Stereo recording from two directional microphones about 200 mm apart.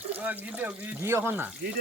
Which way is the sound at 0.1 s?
10° right (ahead or behind).